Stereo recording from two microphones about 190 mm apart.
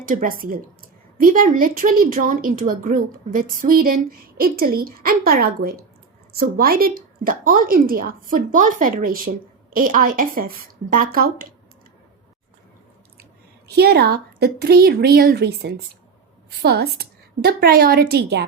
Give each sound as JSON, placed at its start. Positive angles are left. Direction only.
{"t": 0.0, "sound": "a woman's voice", "side_deg": -45}
{"t": 13.7, "sound": "a woman's voice", "side_deg": -55}